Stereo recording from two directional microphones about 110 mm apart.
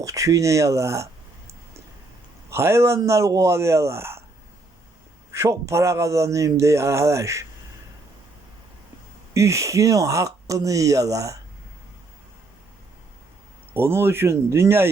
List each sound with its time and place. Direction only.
0.0 s a man's voice: 30° right (ahead or behind)
2.5 s a man's voice: 25° right (ahead or behind)
5.3 s a man's voice: 25° right (ahead or behind)
9.3 s a man's voice: 25° right (ahead or behind)
13.7 s a man's voice: 20° right (ahead or behind)